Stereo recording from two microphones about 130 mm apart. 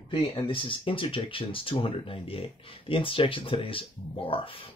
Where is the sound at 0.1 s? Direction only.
40° left (ahead or behind).